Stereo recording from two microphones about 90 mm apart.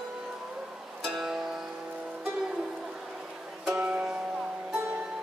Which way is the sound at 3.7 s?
10° right (ahead or behind).